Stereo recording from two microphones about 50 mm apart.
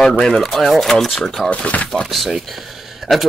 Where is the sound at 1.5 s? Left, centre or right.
Left.